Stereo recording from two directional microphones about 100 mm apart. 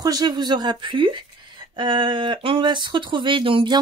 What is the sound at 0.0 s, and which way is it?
Speech, 40° right (ahead or behind).